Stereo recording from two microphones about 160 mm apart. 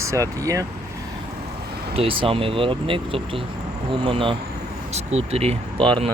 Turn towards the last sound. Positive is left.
turn(degrees=-30)  # may be behind; listen again after turning